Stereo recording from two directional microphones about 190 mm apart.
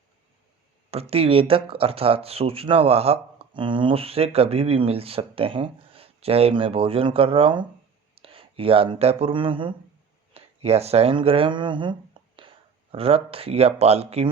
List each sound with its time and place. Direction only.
0.9 s speech: 30° right (ahead or behind)